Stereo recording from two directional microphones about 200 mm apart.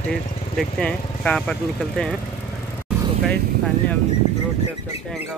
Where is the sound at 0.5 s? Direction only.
5° left (ahead or behind).